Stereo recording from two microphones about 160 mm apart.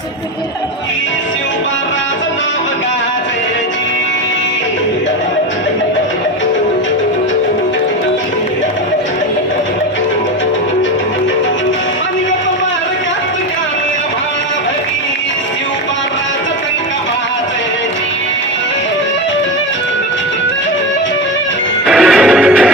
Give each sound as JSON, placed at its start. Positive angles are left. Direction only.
{"t": 21.8, "sound": "music", "side_deg": -5}